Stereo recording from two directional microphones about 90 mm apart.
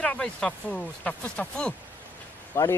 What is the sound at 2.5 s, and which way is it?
Speech, 30° left (ahead or behind).